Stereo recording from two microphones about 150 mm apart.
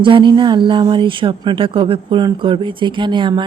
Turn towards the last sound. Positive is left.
turn(degrees=-30)  # may be behind; listen again after turning